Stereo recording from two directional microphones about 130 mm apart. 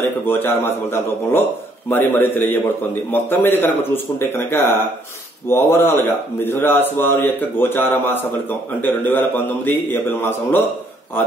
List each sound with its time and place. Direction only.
0.3 s a man's voice: 15° left (ahead or behind)